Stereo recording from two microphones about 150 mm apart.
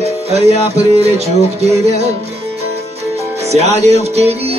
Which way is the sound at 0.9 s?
45° right (ahead or behind).